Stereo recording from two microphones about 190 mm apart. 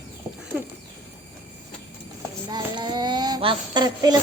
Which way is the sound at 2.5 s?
25° right (ahead or behind).